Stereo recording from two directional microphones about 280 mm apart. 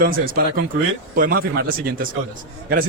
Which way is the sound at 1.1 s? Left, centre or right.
Right.